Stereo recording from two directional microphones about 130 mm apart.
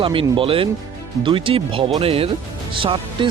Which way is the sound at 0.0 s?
40° right (ahead or behind).